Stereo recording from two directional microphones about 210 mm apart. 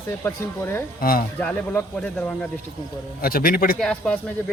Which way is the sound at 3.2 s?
45° left (ahead or behind).